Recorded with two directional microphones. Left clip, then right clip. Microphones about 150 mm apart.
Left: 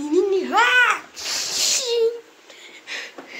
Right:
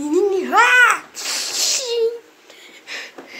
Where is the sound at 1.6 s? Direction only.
Centre (ahead or behind).